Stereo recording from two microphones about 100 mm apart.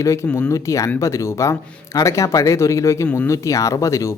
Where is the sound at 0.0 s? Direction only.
30° left (ahead or behind).